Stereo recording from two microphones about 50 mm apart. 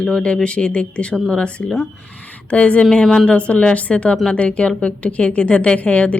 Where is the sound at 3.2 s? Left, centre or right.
Left.